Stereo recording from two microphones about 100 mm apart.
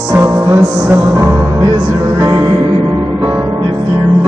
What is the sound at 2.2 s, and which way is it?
Music, 40° right (ahead or behind).